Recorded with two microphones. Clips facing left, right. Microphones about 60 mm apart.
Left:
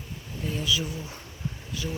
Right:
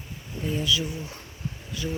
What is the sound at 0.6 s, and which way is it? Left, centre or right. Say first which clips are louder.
Speech: right 1 dB; centre.